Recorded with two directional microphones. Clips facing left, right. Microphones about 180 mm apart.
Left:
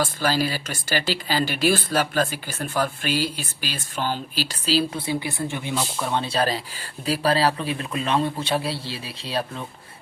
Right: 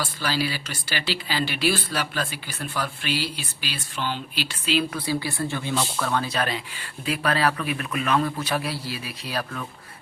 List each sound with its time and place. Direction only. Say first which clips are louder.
0.0 s speech: left 4 dB; 45° left (ahead or behind); by 9.6 s 25° left (ahead or behind)